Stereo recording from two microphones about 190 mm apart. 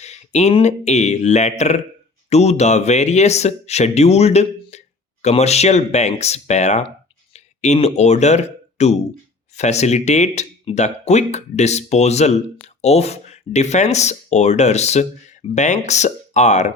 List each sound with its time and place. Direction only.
0.0 s speech: 35° left (ahead or behind)